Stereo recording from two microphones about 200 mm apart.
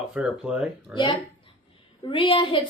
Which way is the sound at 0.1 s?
5° right (ahead or behind).